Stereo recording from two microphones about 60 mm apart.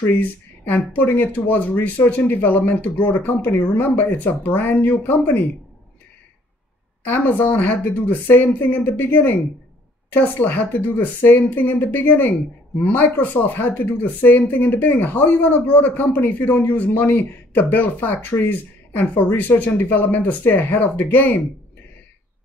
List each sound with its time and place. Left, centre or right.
0.0 s speech: left
7.1 s speech: left